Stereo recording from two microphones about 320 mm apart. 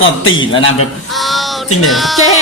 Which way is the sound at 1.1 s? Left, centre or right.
Centre.